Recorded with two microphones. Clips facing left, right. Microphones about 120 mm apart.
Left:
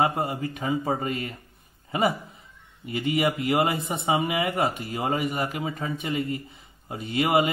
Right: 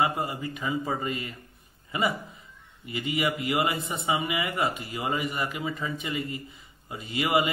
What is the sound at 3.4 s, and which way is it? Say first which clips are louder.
A man's voice: left 3 dB; 60° left (ahead or behind).